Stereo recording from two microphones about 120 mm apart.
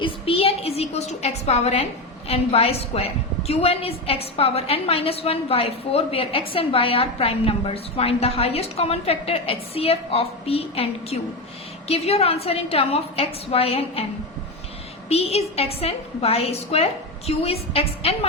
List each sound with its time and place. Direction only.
0.0 s a woman's voice: 50° left (ahead or behind)
15.1 s a woman's voice: 60° left (ahead or behind)